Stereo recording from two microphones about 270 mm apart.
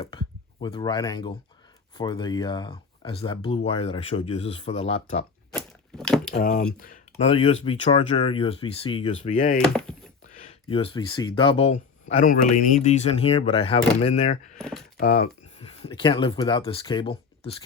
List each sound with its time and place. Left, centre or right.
0.0 s a sound: centre
2.0 s speech: centre
5.5 s a sound: centre
6.3 s speech: left
9.6 s door: centre
10.3 s speech: left